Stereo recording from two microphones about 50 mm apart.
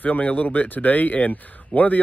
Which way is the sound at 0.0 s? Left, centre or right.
Left.